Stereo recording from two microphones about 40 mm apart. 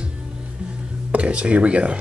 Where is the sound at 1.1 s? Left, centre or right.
Right.